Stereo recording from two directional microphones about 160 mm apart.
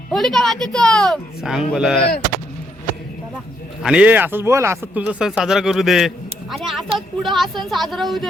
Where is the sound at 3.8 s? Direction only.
5° right (ahead or behind).